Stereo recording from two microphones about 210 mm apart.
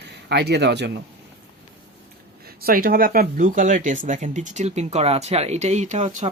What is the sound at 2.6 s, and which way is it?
Speech, 45° right (ahead or behind).